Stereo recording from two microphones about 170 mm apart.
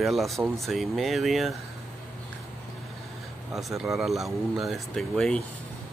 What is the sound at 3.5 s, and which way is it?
Speech, centre (ahead or behind).